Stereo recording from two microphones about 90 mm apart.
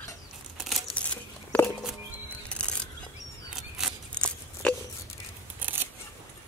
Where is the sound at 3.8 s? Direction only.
5° right (ahead or behind).